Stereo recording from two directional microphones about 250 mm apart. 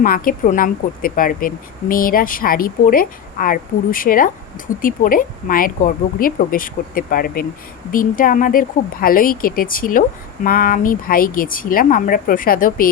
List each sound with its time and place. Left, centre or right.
0.0 s speech: left